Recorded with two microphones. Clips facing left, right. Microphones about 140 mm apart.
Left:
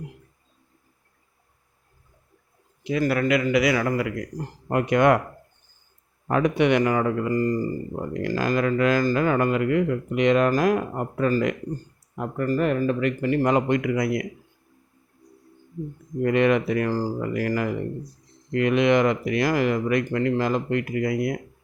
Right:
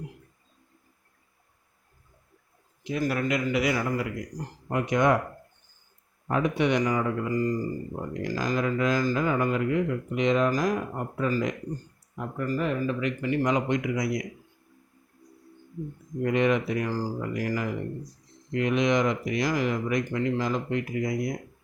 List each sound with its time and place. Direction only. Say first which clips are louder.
2.8 s a man's voice: left 5 dB; 90° left
4.7 s speech: left 4 dB; 60° left (ahead or behind)
6.2 s speech: left 4 dB; 70° left (ahead or behind)
16.2 s speech: left 4 dB; 65° left (ahead or behind)
18.5 s speech: left 5 dB; 65° left (ahead or behind)